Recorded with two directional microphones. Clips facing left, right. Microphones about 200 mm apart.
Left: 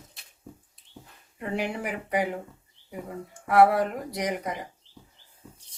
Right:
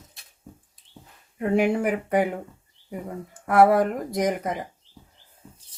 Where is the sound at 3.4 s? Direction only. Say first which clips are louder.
Right 2 dB; 45° right (ahead or behind).